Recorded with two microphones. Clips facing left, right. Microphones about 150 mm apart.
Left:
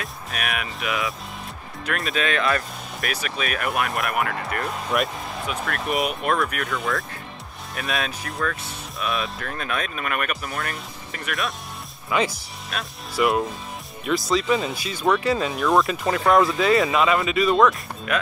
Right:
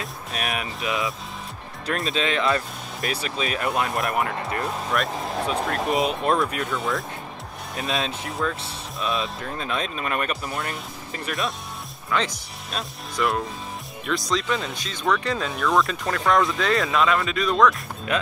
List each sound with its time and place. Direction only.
0.0 s speech: 30° right (ahead or behind)
4.6 s speech: centre (ahead or behind)
5.4 s speech: 30° right (ahead or behind)
6.7 s speech: centre (ahead or behind)
7.7 s speech: 25° right (ahead or behind)
12.1 s speech: 10° left (ahead or behind)
18.1 s speech: 30° right (ahead or behind)